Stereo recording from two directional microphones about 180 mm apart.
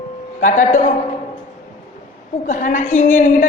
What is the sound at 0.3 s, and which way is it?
Speech, 45° left (ahead or behind).